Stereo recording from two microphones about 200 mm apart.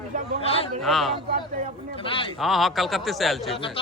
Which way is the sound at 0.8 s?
Centre (ahead or behind).